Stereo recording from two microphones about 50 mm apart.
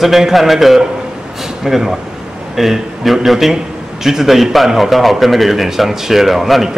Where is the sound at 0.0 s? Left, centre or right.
Centre.